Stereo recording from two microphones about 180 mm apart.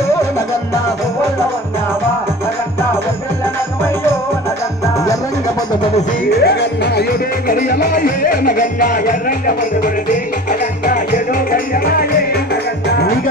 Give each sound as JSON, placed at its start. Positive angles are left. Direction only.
{"t": 3.8, "sound": "music", "side_deg": 15}
{"t": 6.2, "sound": "music", "side_deg": 65}